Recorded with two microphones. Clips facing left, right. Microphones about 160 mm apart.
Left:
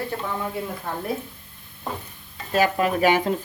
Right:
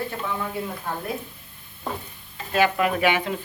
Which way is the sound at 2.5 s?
35° left (ahead or behind).